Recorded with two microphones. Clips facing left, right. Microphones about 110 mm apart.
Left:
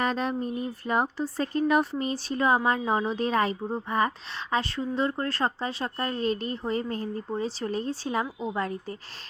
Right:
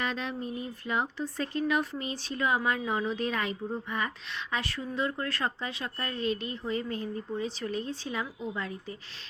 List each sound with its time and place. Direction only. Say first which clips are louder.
0.0 s a woman's voice: left 6 dB; 40° left (ahead or behind)